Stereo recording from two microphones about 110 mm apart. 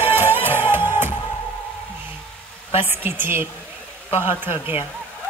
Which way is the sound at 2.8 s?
20° right (ahead or behind).